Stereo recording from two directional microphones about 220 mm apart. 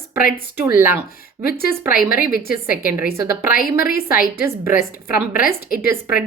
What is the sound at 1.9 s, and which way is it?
Speech, 40° left (ahead or behind).